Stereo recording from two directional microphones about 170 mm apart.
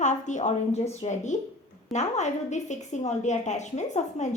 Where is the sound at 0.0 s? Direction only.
45° left (ahead or behind).